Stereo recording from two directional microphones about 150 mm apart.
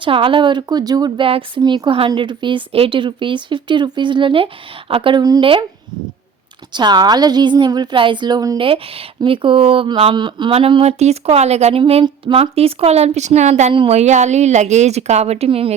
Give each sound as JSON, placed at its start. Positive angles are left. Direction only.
{"t": 0.0, "sound": "a woman's voice", "side_deg": -35}
{"t": 6.7, "sound": "a woman's voice", "side_deg": -30}